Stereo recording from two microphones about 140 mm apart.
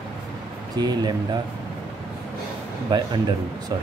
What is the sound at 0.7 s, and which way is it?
Speech, 30° right (ahead or behind).